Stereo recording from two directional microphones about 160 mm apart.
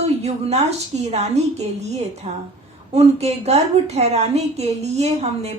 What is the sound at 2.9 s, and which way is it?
A woman's voice, 40° right (ahead or behind).